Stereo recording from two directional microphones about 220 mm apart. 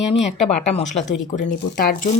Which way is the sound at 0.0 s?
30° left (ahead or behind).